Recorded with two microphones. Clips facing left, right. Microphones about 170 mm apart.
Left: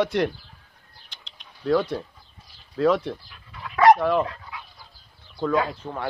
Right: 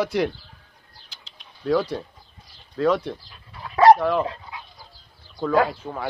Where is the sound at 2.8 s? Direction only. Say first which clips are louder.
Even; centre (ahead or behind).